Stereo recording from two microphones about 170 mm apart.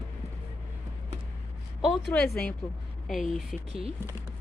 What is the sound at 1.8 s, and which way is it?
A woman's voice, centre (ahead or behind).